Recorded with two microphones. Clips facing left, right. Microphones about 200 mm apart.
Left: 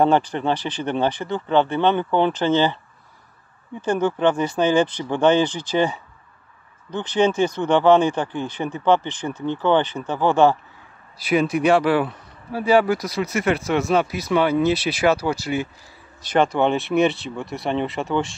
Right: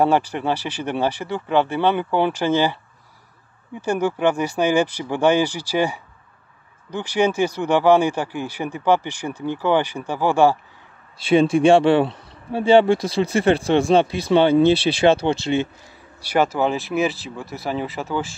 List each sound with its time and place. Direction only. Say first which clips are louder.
0.0 s speech: even; 10° right (ahead or behind)
3.8 s speech: even; 10° right (ahead or behind)
11.1 s speech: right 4 dB; 30° right (ahead or behind)
16.2 s speech: left 1 dB; 10° right (ahead or behind)